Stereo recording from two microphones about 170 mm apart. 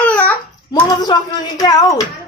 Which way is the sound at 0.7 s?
25° left (ahead or behind).